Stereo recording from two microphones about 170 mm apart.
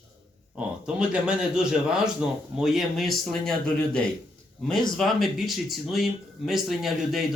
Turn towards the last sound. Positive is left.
turn(degrees=0)  # may be behind; listen again after turning